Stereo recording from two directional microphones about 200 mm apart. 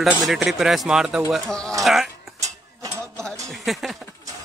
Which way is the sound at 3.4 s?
Centre (ahead or behind).